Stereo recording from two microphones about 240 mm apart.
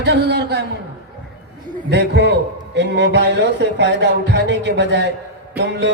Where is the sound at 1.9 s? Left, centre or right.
Right.